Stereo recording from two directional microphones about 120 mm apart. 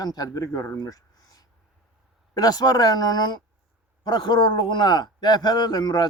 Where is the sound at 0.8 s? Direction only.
30° left (ahead or behind).